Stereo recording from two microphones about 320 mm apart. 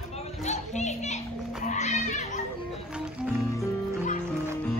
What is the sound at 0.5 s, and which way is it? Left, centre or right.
Music, left.